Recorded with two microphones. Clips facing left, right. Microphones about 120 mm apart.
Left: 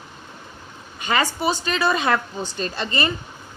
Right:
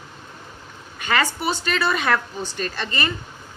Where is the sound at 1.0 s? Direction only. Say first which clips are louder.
Left 1 dB; 20° left (ahead or behind).